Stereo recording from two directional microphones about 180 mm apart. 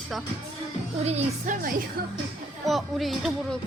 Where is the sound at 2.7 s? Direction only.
Centre (ahead or behind).